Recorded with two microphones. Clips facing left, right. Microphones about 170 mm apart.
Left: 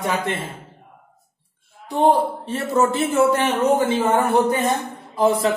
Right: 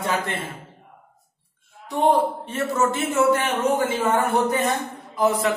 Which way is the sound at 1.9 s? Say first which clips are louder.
Left 2 dB; 30° left (ahead or behind).